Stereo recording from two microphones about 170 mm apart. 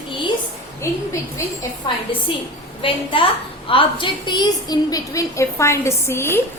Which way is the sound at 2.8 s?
30° left (ahead or behind).